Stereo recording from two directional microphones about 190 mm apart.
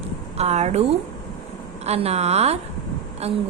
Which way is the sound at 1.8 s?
35° right (ahead or behind).